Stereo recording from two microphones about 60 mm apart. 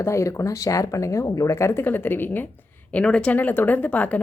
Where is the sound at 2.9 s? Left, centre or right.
Centre.